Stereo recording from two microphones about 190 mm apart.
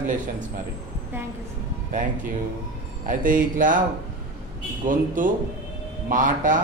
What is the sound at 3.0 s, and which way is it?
Speech, 45° right (ahead or behind).